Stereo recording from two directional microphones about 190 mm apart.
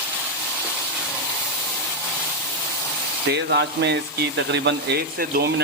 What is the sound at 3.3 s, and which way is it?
Speech, 60° right (ahead or behind).